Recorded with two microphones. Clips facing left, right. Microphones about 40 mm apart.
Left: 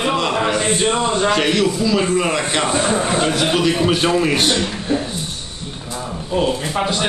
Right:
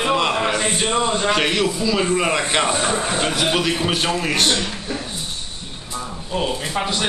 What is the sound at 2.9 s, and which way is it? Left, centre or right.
Speech, centre.